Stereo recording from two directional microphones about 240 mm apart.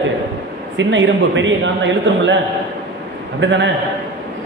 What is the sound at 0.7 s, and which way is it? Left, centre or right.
A man's voice, right.